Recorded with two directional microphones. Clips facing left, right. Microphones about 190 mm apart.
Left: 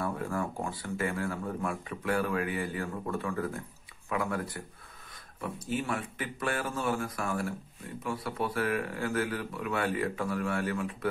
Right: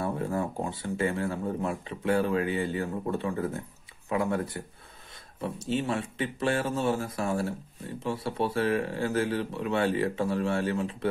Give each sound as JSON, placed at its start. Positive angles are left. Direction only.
{"t": 0.0, "sound": "speech", "side_deg": -25}